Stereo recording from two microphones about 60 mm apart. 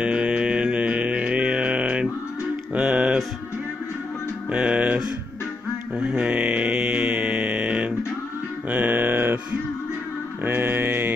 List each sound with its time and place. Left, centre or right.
0.0 s mantra: centre
2.7 s music: centre
4.5 s music: centre
5.9 s mantra: right
8.6 s music: right
10.4 s mantra: right